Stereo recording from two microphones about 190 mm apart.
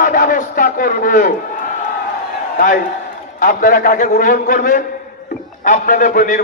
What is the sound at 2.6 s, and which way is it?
A man's voice, 45° left (ahead or behind).